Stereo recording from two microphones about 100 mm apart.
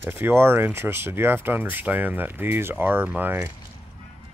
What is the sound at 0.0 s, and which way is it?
Speech, 20° right (ahead or behind).